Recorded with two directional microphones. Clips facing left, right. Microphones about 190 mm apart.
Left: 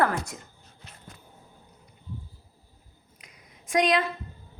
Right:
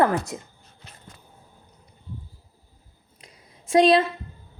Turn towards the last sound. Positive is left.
turn(degrees=-30)  # may be behind; listen again after turning